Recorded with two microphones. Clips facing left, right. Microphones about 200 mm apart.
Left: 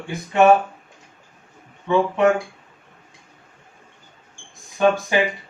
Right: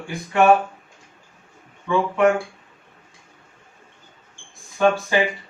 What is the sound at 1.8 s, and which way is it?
Speech, 20° left (ahead or behind).